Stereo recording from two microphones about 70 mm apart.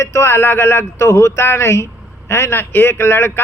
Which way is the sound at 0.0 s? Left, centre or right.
Left.